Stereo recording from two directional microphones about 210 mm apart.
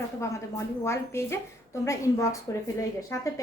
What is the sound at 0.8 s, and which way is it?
A woman's voice, 15° left (ahead or behind).